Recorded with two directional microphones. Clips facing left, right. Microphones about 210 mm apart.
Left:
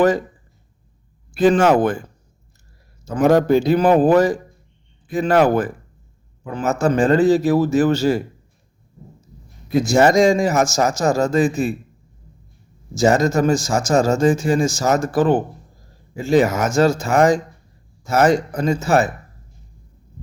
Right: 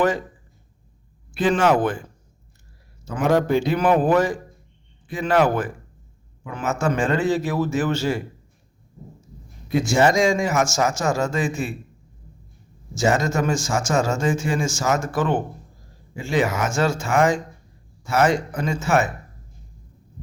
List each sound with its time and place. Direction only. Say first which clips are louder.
1.3 s speech: left 5 dB; 45° left (ahead or behind)
3.0 s a man's voice: left 5 dB; 40° left (ahead or behind)
9.8 s a man's voice: left 5 dB; 40° left (ahead or behind)
12.9 s a man's voice: left 5 dB; 40° left (ahead or behind)